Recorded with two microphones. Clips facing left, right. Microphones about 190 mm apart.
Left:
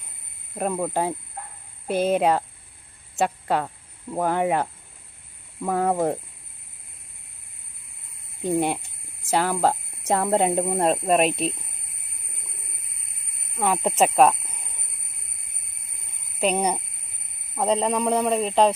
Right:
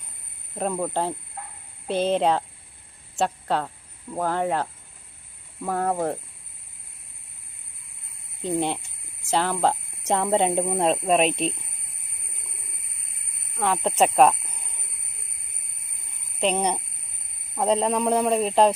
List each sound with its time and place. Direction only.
0.5 s speech: 5° left (ahead or behind)
8.4 s speech: 10° left (ahead or behind)
13.6 s speech: 10° left (ahead or behind)
16.4 s speech: 5° left (ahead or behind)